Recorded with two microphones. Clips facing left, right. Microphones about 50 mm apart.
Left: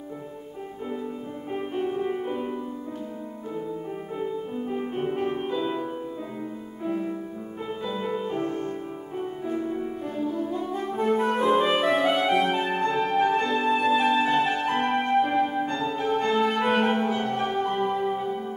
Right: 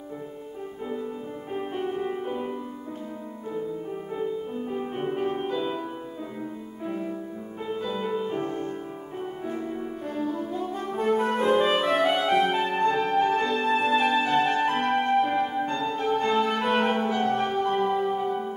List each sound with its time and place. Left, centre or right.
1.5 s music: centre
4.2 s music: centre
6.9 s music: centre
8.5 s music: left
9.5 s music: centre